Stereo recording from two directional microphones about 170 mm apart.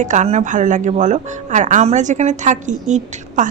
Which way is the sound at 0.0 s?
45° right (ahead or behind).